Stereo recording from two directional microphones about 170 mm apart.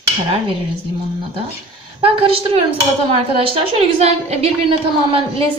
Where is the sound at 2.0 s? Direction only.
35° right (ahead or behind).